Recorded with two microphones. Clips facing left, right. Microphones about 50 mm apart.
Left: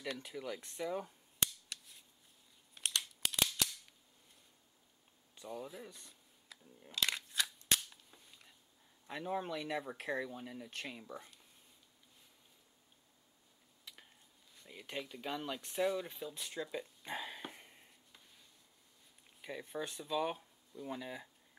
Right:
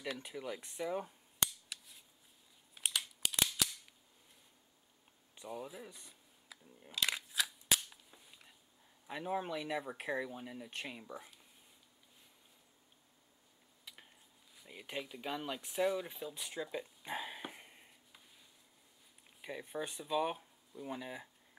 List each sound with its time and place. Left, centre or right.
0.0 s cap gun: centre
5.3 s a sound: centre
9.0 s speech: centre
13.9 s a sound: centre
14.5 s speech: centre
19.4 s speech: centre